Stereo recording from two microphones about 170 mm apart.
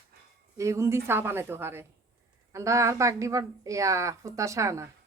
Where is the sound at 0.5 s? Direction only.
15° right (ahead or behind).